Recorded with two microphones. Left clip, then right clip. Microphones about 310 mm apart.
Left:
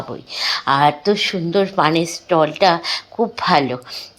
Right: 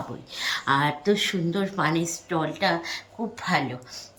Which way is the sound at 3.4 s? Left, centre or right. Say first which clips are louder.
Left 9 dB; left.